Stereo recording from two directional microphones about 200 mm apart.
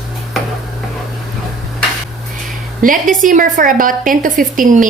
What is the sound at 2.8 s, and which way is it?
A woman's voice, 40° right (ahead or behind).